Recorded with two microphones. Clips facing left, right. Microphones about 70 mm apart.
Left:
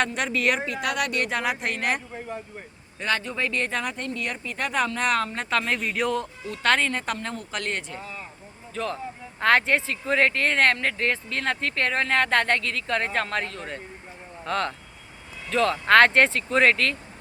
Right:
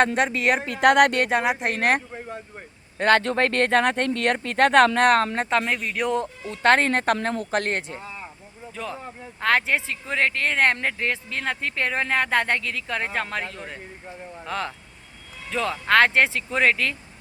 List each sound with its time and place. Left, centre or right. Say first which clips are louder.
0.2 s speech: right 3 dB; right
0.6 s speech: right 10 dB; right
1.2 s speech: right 4 dB; right
1.7 s speech: right 5 dB; right
3.0 s speech: right 8 dB; right
5.8 s speech: even; centre
6.4 s speech: right 5 dB; right
8.7 s speech: left 3 dB; centre
10.6 s speech: right 1 dB; centre